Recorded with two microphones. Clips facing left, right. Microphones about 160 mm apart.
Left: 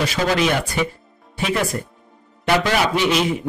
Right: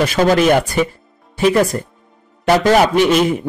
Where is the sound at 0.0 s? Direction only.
50° right (ahead or behind).